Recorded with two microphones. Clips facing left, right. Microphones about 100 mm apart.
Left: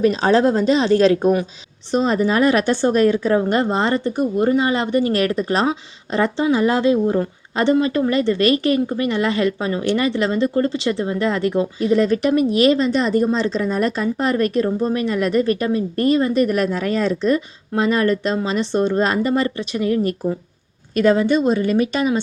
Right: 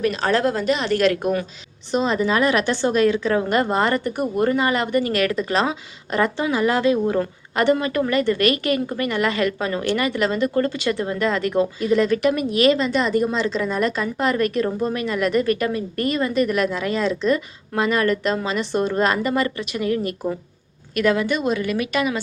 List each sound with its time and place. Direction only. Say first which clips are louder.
0.0 s speech: left 5 dB; 20° left (ahead or behind)
1.9 s a woman's voice: left 2 dB; 40° left (ahead or behind)